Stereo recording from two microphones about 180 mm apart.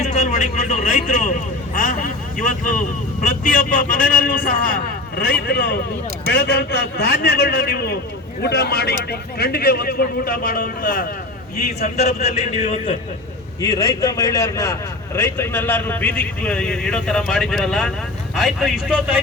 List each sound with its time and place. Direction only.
0.0 s a sound: 40° left (ahead or behind); by 5.8 s 55° left (ahead or behind)
6.3 s a man's voice: 60° left (ahead or behind)
11.8 s a man's voice: 35° left (ahead or behind)
13.6 s a man's voice: 20° left (ahead or behind); by 19.2 s 5° right (ahead or behind)